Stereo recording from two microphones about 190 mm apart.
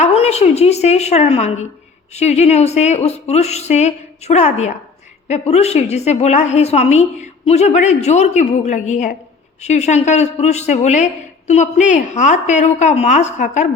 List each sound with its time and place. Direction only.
0.0 s a woman's voice: 35° left (ahead or behind)